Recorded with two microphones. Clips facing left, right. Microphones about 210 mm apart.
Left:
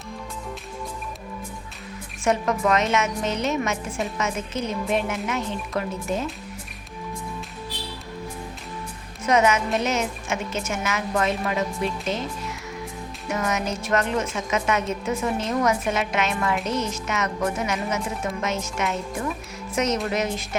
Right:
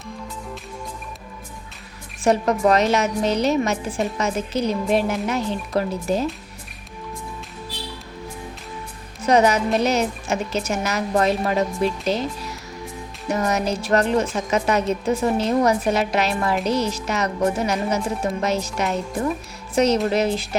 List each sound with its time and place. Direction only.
2.2 s a woman's voice: 35° right (ahead or behind)
9.2 s a woman's voice: 35° right (ahead or behind)